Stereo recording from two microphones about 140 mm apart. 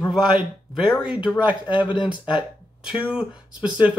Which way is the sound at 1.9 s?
35° left (ahead or behind).